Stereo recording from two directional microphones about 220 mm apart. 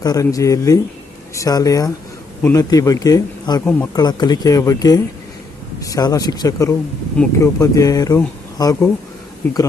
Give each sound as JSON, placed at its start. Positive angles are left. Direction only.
{"t": 0.0, "sound": "speech", "side_deg": 15}